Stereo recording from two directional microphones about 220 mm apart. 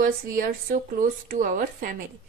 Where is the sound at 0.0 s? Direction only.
40° right (ahead or behind).